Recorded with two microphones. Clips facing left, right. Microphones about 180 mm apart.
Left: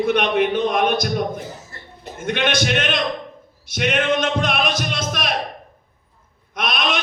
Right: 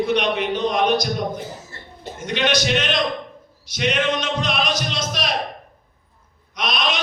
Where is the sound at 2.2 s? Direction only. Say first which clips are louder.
Even; 55° left (ahead or behind).